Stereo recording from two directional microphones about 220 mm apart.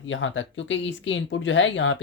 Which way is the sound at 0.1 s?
60° left (ahead or behind).